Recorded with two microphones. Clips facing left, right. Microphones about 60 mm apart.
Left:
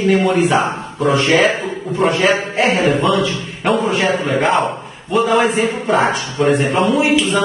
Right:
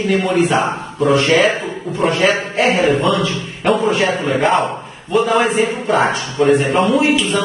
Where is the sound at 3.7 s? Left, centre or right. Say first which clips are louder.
Right 1 dB; centre.